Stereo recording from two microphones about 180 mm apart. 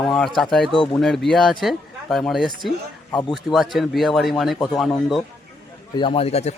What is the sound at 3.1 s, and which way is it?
Speech, 25° left (ahead or behind).